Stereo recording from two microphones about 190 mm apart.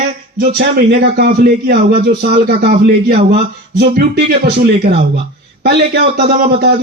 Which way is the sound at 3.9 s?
55° right (ahead or behind).